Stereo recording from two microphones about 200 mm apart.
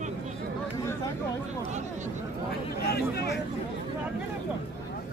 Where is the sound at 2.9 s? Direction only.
50° left (ahead or behind).